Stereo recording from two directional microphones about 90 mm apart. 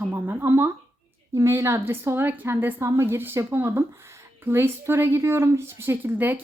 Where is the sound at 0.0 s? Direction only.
25° right (ahead or behind).